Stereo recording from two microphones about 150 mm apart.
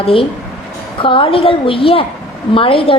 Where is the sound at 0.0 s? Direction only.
40° left (ahead or behind).